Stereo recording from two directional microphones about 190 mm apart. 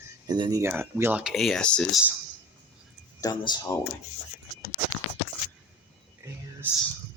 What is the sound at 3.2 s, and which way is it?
Speech, 20° left (ahead or behind).